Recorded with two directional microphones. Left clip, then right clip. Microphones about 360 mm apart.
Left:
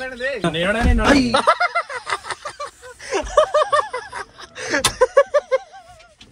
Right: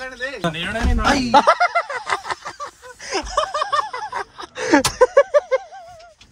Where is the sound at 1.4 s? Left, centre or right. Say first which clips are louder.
Right 1 dB; right.